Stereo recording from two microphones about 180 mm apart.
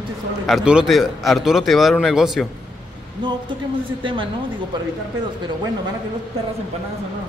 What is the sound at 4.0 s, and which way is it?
Speech, 30° right (ahead or behind).